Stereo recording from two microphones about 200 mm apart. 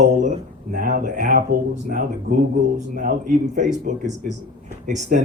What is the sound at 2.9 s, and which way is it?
Speech, 40° right (ahead or behind).